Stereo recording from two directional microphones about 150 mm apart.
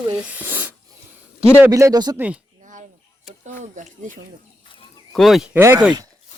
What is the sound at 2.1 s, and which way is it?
Speech, 10° right (ahead or behind).